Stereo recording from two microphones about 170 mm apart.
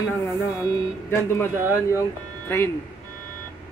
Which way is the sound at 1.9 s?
15° left (ahead or behind).